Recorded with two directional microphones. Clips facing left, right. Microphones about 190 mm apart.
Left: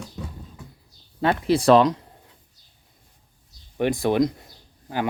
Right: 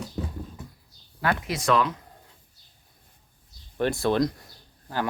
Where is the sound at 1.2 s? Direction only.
30° left (ahead or behind).